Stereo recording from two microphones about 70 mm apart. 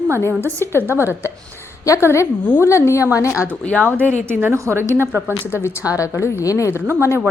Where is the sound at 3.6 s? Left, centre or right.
Centre.